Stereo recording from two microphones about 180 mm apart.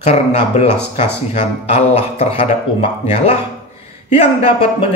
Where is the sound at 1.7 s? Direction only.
35° left (ahead or behind).